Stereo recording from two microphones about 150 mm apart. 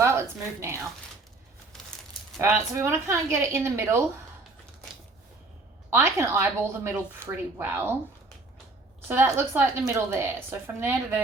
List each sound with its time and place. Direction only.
0.0 s a woman's voice: 20° right (ahead or behind)
2.4 s a woman's voice: 15° right (ahead or behind)
5.9 s a woman's voice: 15° right (ahead or behind)
9.0 s a woman's voice: 15° right (ahead or behind)